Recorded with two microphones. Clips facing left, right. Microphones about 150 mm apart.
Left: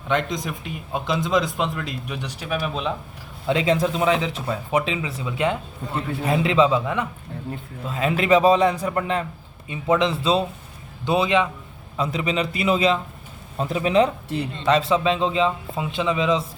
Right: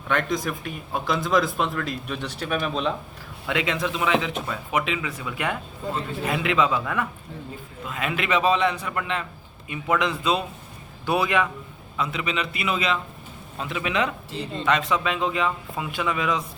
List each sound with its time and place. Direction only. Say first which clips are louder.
0.1 s speech: left 1 dB; 20° left (ahead or behind)
3.4 s a man's voice: left 6 dB; 30° left (ahead or behind)
7.9 s a man's voice: left 7 dB; 30° left (ahead or behind)
11.9 s a man's voice: left 4 dB; 35° left (ahead or behind)